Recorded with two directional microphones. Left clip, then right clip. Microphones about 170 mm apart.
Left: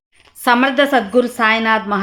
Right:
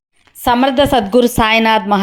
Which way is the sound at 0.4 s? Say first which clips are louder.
Right 1 dB; 15° right (ahead or behind).